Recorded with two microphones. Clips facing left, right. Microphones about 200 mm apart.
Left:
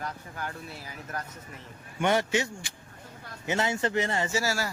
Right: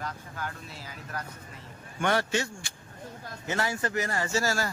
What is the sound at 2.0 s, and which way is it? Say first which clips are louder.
Speech: left 2 dB; 20° left (ahead or behind).